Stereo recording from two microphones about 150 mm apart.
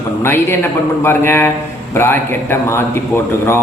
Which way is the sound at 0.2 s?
15° left (ahead or behind).